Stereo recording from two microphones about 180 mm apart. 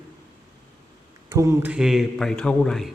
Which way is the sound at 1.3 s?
20° right (ahead or behind).